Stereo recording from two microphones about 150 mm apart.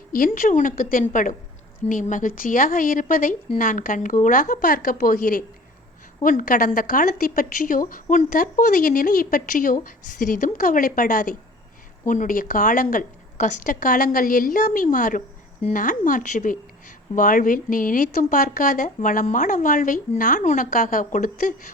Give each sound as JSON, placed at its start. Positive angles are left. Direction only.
{"t": 0.1, "sound": "a woman's voice", "side_deg": 70}